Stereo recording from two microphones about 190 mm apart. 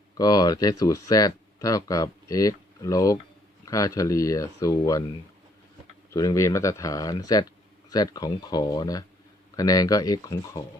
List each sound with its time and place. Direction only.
0.2 s speech: 20° left (ahead or behind)
6.1 s speech: 15° left (ahead or behind)